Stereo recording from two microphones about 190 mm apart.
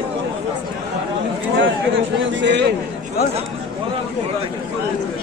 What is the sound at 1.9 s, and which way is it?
Speech, 80° right.